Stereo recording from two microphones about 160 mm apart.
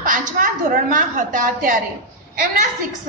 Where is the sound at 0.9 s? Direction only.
55° right (ahead or behind).